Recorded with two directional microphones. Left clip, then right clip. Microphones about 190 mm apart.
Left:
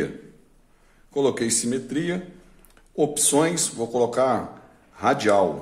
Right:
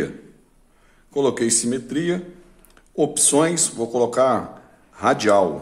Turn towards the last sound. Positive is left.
turn(degrees=-10)  # may be behind; listen again after turning